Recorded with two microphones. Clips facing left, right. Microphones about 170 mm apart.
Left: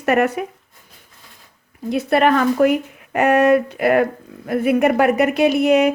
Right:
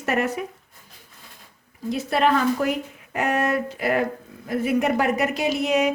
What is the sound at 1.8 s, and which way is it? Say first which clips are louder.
Speech: left 5 dB; 60° left (ahead or behind).